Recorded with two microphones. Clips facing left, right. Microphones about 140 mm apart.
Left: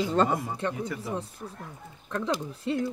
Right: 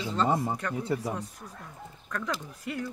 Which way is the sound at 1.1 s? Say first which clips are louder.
Left 3 dB; 30° left (ahead or behind).